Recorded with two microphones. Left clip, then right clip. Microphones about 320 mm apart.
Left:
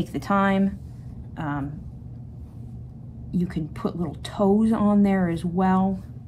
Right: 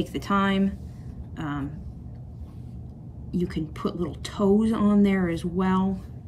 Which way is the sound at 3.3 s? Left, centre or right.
Centre.